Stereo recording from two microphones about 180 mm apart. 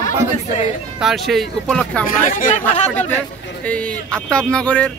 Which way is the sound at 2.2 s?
45° left (ahead or behind).